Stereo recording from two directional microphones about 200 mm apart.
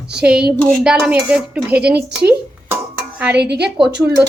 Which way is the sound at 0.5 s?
5° left (ahead or behind).